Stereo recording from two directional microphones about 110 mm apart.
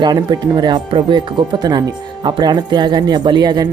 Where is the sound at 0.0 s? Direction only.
40° right (ahead or behind).